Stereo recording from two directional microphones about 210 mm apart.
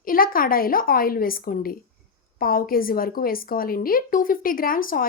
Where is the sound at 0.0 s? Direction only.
45° left (ahead or behind).